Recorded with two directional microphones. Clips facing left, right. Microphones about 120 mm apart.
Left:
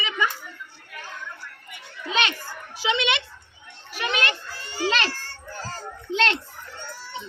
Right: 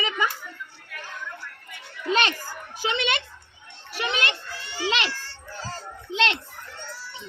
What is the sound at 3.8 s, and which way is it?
Children playing, 30° right (ahead or behind).